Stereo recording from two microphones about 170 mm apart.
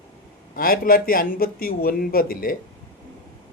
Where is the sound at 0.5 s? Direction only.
60° left (ahead or behind).